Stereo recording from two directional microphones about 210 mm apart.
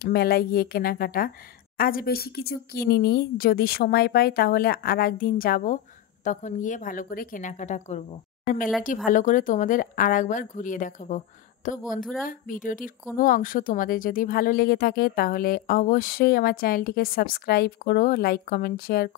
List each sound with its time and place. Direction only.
0.0 s speech: 50° left (ahead or behind)